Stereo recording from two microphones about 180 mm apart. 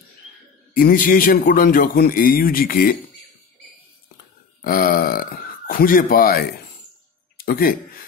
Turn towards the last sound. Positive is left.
turn(degrees=55)  # may be behind; listen again after turning